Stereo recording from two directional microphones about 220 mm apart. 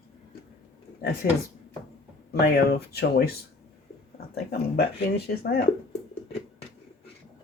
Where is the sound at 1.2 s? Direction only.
40° left (ahead or behind).